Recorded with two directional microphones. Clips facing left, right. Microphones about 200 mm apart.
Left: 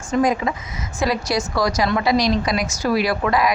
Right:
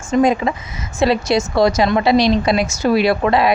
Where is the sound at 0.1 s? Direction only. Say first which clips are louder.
Right 4 dB; 25° right (ahead or behind).